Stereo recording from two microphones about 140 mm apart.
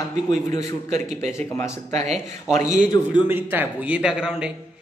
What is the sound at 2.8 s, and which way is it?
Speech, 30° left (ahead or behind).